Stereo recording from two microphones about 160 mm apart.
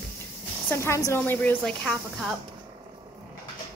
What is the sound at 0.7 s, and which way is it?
A woman's voice, 15° left (ahead or behind).